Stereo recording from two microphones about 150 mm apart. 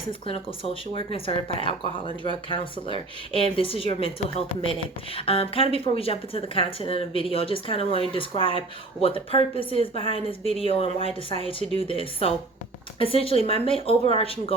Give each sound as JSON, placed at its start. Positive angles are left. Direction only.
{"t": 0.1, "sound": "speech", "side_deg": 35}